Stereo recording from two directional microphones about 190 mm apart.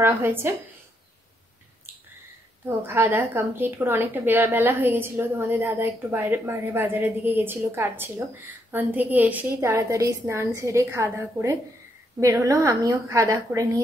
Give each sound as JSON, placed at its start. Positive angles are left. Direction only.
{"t": 0.0, "sound": "a woman's voice", "side_deg": -10}
{"t": 2.6, "sound": "a woman's voice", "side_deg": -10}